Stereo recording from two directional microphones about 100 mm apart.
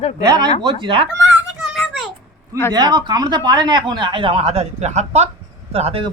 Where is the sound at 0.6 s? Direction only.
55° right (ahead or behind).